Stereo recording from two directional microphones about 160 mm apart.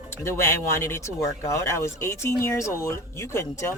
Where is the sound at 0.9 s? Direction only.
20° left (ahead or behind).